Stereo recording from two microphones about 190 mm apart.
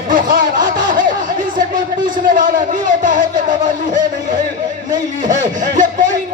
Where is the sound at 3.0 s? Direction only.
45° right (ahead or behind).